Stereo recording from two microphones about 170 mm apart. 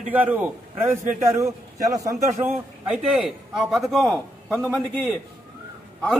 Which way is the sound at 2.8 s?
5° right (ahead or behind).